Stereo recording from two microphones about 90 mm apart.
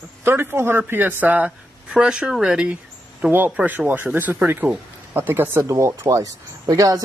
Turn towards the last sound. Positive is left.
turn(degrees=-40)  # may be behind; listen again after turning